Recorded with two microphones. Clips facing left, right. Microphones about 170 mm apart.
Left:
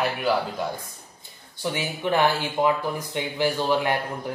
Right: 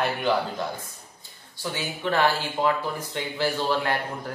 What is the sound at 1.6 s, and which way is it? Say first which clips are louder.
Speech: left 3 dB; 20° left (ahead or behind).